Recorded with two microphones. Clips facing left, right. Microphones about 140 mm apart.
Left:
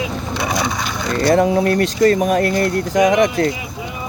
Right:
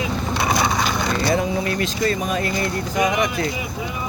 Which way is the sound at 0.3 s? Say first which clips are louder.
Even; 55° right (ahead or behind).